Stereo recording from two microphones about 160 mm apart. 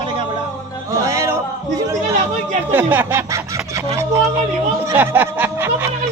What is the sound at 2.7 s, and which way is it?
Speech, 10° right (ahead or behind).